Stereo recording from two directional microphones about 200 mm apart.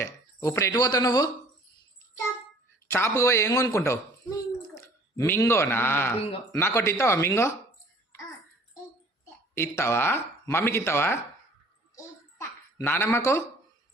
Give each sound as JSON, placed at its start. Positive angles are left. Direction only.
{"t": 0.0, "sound": "speech", "side_deg": 15}
{"t": 2.9, "sound": "speech", "side_deg": 15}
{"t": 9.6, "sound": "speech", "side_deg": 10}
{"t": 11.9, "sound": "babbling", "side_deg": 10}